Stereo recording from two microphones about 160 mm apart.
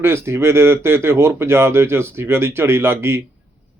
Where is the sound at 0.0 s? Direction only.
15° right (ahead or behind).